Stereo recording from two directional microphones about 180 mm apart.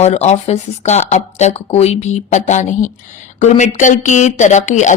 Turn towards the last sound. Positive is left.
turn(degrees=40)  # may be behind; listen again after turning